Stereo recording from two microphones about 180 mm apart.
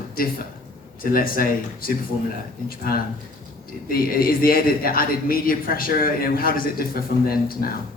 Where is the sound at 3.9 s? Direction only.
55° left (ahead or behind).